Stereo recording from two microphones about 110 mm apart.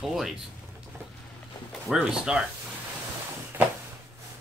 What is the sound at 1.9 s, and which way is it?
Speech, 10° right (ahead or behind).